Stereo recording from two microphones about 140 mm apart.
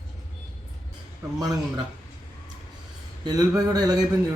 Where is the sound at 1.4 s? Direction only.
30° right (ahead or behind).